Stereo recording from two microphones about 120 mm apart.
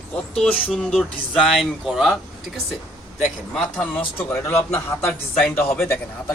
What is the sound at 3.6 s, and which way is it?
Speech, 10° left (ahead or behind).